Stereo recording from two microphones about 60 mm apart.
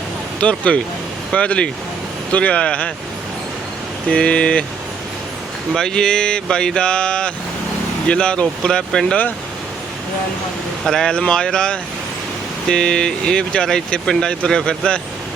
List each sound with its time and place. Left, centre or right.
0.3 s speech: centre
4.1 s speech: centre
5.7 s speech: centre
10.8 s speech: centre